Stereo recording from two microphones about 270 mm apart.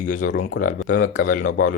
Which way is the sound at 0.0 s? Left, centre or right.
Left.